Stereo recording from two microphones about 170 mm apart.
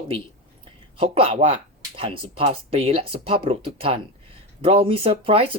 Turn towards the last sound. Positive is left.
turn(degrees=-35)  # may be behind; listen again after turning